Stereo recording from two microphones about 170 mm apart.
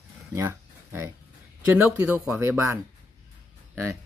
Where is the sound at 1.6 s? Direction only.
10° right (ahead or behind).